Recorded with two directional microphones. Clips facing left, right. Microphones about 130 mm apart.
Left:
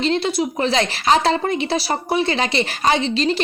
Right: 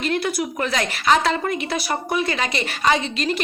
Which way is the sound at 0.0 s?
25° left (ahead or behind).